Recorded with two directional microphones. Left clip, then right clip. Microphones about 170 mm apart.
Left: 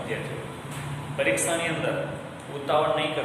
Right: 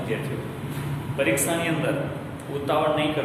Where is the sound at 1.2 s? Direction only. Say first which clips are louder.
Right 1 dB; 15° right (ahead or behind).